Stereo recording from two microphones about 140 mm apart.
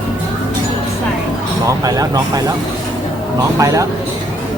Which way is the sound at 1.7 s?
25° right (ahead or behind).